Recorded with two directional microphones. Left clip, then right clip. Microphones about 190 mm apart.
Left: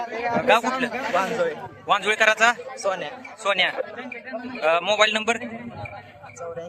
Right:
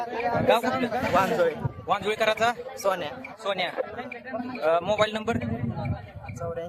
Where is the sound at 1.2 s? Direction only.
50° right (ahead or behind).